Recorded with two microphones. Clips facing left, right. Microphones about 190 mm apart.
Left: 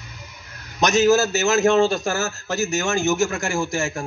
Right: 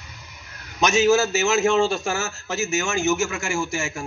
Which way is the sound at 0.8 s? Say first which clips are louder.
Left 1 dB; 40° left (ahead or behind).